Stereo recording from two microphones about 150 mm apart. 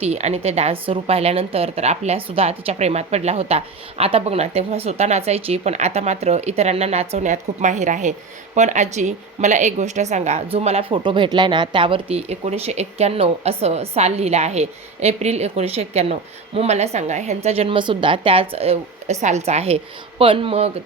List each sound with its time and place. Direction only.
0.0 s a woman's voice: 45° right (ahead or behind)